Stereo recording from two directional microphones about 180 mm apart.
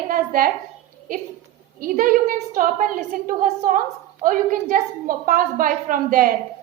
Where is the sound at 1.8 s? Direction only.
50° right (ahead or behind).